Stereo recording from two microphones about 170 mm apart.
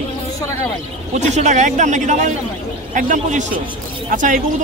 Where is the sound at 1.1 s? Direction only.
45° right (ahead or behind).